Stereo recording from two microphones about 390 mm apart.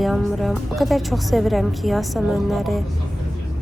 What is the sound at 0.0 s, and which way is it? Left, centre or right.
A woman's voice, centre.